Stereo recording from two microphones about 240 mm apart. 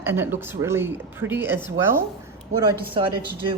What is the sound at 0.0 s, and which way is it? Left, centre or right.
Speech, centre.